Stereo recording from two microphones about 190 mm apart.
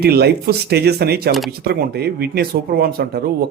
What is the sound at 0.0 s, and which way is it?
Speech, 55° right (ahead or behind).